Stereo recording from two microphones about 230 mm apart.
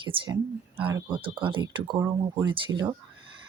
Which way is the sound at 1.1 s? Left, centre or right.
Right.